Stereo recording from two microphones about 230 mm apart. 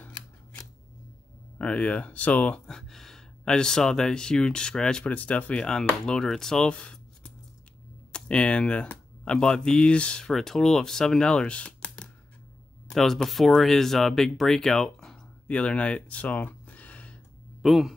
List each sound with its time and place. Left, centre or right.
1.6 s speech: centre